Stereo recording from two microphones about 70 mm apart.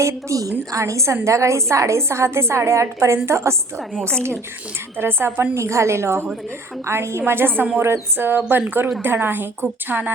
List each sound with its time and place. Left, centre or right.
0.0 s a woman's voice: right
4.9 s a woman's voice: right